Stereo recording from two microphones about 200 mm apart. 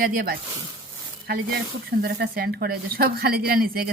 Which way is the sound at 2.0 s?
55° right (ahead or behind).